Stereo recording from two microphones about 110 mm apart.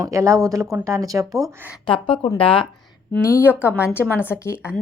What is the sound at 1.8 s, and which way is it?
Speech, 50° left (ahead or behind).